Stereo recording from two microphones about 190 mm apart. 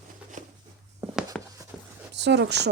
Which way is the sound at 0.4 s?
40° right (ahead or behind).